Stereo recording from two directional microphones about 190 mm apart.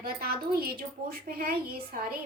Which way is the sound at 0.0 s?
50° right (ahead or behind).